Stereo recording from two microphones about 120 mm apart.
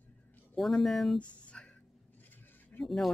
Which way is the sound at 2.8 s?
Centre (ahead or behind).